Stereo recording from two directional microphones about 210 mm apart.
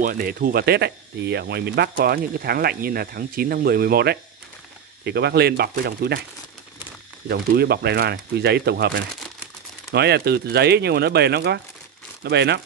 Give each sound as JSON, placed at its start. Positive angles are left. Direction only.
{"t": 0.0, "sound": "speech", "side_deg": -45}
{"t": 7.2, "sound": "speech", "side_deg": -50}